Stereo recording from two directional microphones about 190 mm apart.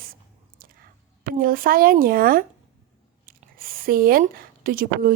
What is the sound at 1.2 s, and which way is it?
Speech, 50° right (ahead or behind).